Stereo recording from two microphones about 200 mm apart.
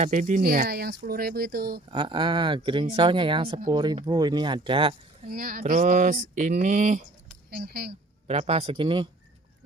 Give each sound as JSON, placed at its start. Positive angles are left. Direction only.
{"t": 0.0, "sound": "speech", "side_deg": -40}
{"t": 1.9, "sound": "speech", "side_deg": -25}
{"t": 5.3, "sound": "a sound", "side_deg": -45}
{"t": 7.5, "sound": "speech", "side_deg": -55}
{"t": 8.3, "sound": "speech", "side_deg": -30}